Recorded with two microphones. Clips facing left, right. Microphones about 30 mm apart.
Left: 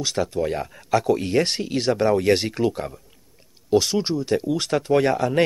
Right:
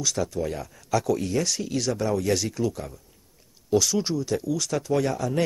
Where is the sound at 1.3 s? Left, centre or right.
Left.